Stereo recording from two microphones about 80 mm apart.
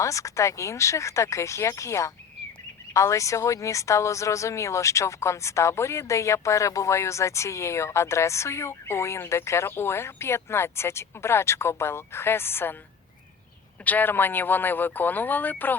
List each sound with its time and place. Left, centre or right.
0.0 s speech: left
13.8 s speech: left